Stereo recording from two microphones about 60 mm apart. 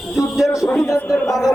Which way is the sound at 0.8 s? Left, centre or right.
Left.